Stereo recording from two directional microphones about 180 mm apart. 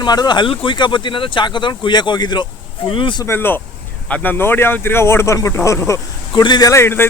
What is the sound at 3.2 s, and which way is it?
Speech, 15° left (ahead or behind).